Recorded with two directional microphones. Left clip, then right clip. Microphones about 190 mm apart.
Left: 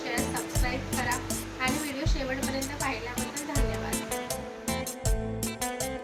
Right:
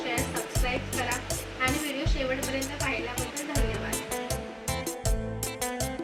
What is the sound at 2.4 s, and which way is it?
Music, centre (ahead or behind).